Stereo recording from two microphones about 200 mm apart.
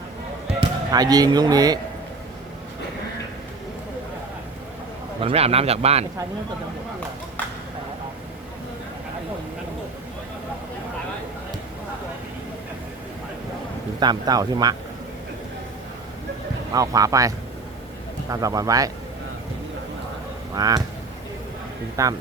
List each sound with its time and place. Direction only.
0.6 s speech: 20° right (ahead or behind)
5.2 s speech: 30° right (ahead or behind)
14.0 s speech: 20° right (ahead or behind)
16.7 s speech: 15° right (ahead or behind)
20.6 s speech: 20° right (ahead or behind)
22.0 s speech: 15° right (ahead or behind)